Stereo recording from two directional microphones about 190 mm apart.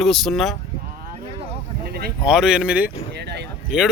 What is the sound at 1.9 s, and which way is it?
Speech, 55° right (ahead or behind).